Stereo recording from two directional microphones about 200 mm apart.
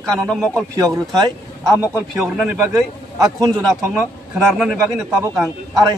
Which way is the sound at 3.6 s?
5° right (ahead or behind).